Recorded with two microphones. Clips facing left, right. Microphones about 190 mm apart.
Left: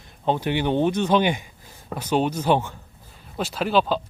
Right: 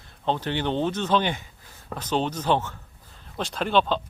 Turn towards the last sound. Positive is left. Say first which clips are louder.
# left 2 dB
turn(degrees=5)  # may be behind; listen again after turning